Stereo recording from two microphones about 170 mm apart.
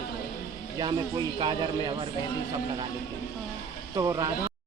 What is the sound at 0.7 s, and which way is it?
Speech, 25° right (ahead or behind).